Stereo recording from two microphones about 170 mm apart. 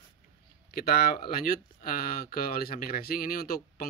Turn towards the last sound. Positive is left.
turn(degrees=60)  # may be behind; listen again after turning